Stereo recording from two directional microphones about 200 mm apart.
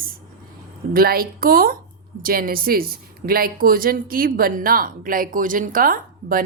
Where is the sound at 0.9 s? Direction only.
50° right (ahead or behind).